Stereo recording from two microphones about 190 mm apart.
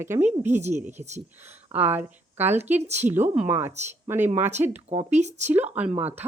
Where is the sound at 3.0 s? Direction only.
10° right (ahead or behind).